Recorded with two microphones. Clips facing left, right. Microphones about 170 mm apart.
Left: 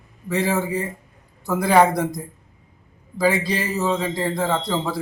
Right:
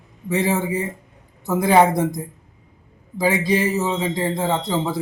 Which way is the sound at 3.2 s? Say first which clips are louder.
Right 2 dB; 15° right (ahead or behind).